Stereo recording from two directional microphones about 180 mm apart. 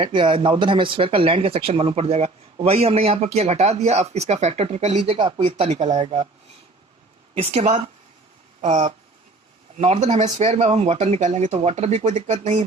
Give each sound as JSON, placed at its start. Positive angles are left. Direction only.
{"t": 0.0, "sound": "speech", "side_deg": -25}
{"t": 7.3, "sound": "speech", "side_deg": -35}